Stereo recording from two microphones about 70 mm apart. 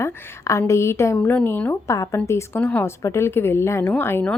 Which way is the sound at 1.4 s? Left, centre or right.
Left.